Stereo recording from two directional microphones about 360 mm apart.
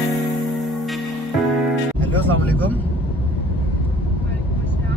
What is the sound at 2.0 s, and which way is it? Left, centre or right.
Music, centre.